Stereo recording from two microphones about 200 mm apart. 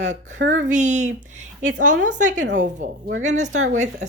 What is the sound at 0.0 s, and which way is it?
Speech, 35° right (ahead or behind).